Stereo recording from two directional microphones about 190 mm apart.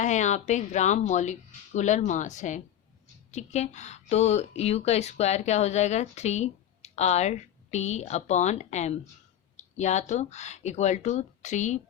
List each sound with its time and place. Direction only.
0.0 s speech: 40° left (ahead or behind)